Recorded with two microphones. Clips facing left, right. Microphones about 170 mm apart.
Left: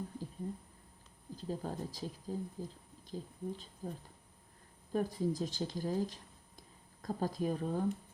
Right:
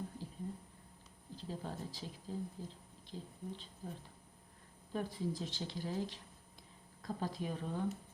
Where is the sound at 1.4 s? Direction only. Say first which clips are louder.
Left 5 dB; 45° left (ahead or behind).